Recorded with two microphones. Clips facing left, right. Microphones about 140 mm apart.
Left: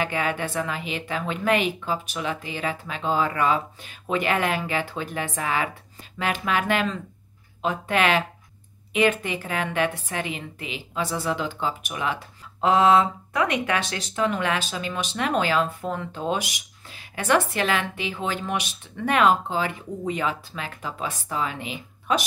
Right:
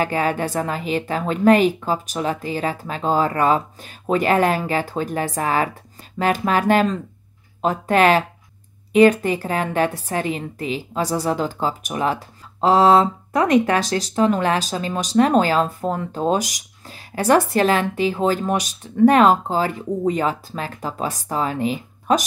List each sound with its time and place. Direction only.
0.0 s a woman's voice: 40° right (ahead or behind)